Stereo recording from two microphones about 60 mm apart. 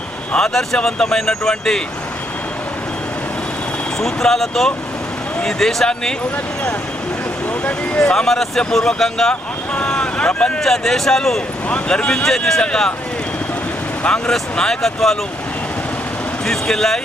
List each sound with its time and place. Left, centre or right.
0.3 s speech: centre
4.0 s speech: centre
7.6 s speech: centre
9.3 s vehicle: centre
10.6 s speech: centre
14.0 s speech: centre
16.5 s speech: centre